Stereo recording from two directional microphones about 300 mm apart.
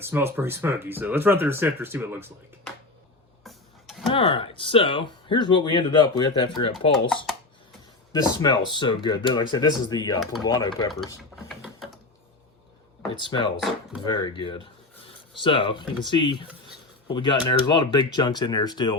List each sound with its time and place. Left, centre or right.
0.0 s speech: centre
4.1 s speech: centre
8.1 s speech: centre
11.2 s ratchet: centre
13.1 s speech: centre